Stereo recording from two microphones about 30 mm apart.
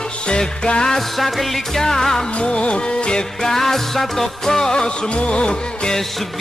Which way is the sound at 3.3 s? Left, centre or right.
Centre.